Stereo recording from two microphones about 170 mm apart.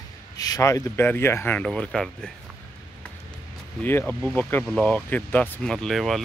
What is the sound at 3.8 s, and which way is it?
Speech, 10° left (ahead or behind).